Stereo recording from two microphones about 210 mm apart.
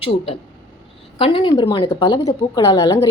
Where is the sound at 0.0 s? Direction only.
25° left (ahead or behind).